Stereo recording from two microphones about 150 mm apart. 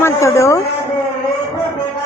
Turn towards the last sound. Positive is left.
turn(degrees=20)  # may be behind; listen again after turning